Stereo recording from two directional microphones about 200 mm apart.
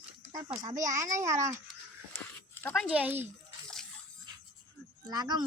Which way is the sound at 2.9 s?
5° right (ahead or behind).